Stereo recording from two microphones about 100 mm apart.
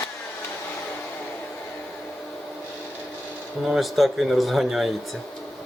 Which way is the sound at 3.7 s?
Centre (ahead or behind).